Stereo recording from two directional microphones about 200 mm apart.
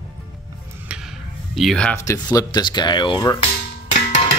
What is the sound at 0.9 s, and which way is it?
Speech, 5° right (ahead or behind).